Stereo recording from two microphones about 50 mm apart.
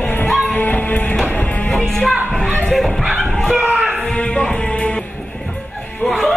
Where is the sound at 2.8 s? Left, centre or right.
Centre.